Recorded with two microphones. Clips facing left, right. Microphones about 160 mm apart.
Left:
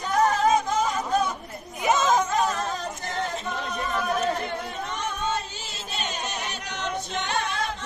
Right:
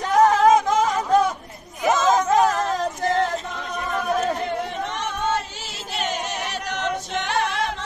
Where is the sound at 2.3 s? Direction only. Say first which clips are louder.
Right 7 dB; 90° right.